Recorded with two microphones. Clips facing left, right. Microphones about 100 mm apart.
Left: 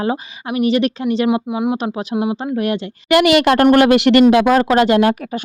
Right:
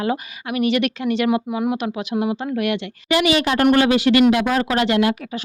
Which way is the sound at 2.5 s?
35° left (ahead or behind).